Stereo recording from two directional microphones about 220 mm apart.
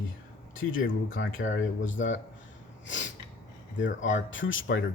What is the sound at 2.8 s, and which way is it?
Snort, 55° left (ahead or behind).